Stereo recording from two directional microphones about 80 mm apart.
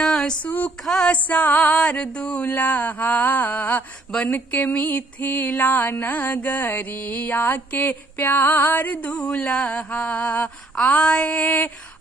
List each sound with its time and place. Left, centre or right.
0.0 s a sound: centre
0.7 s mantra: centre
1.1 s music: centre
4.1 s mantra: centre
4.8 s music: left
9.3 s mantra: centre